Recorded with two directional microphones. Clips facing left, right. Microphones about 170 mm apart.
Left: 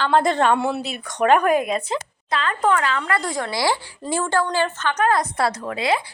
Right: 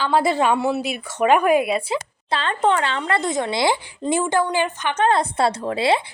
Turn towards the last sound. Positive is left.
turn(degrees=-30)  # may be behind; listen again after turning